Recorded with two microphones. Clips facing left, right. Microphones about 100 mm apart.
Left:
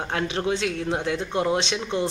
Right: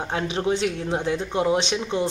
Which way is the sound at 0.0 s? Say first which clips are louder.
Right 1 dB; 20° right (ahead or behind).